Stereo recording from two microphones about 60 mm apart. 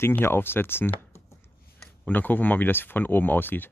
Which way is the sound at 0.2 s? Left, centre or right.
Left.